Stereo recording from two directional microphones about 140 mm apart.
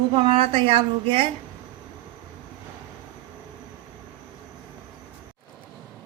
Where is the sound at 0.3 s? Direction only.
40° right (ahead or behind).